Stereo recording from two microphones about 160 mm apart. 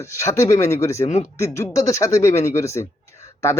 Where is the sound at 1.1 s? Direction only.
45° left (ahead or behind).